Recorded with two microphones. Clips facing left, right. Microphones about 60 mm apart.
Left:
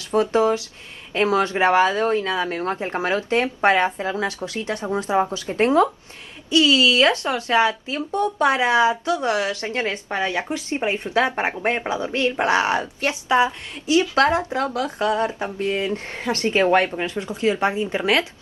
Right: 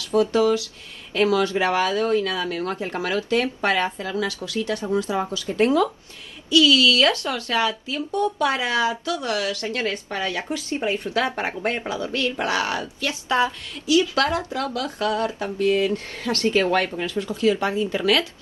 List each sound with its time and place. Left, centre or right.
0.1 s speech: left